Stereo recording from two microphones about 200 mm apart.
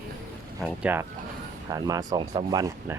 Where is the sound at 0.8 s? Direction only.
10° right (ahead or behind).